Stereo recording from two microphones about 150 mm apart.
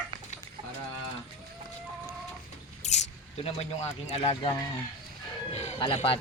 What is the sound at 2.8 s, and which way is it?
Mouse, 50° left (ahead or behind).